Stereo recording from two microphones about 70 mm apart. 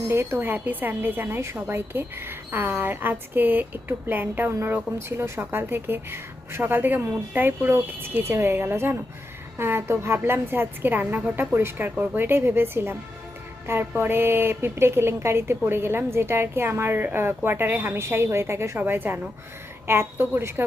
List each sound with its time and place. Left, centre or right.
0.1 s a woman's voice: right
18.8 s a woman's voice: right